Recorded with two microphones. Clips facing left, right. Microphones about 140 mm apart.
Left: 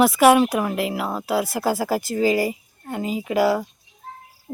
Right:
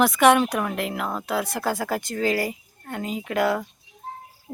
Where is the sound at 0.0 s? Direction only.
5° left (ahead or behind).